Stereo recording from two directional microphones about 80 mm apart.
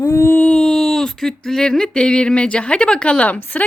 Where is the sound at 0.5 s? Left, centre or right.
Centre.